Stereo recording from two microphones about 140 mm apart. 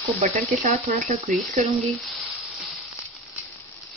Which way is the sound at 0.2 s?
60° right (ahead or behind).